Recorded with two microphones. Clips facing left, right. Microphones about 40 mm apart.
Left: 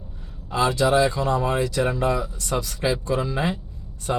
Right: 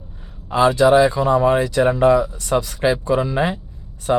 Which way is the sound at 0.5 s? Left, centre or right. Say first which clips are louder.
Right 6 dB; right.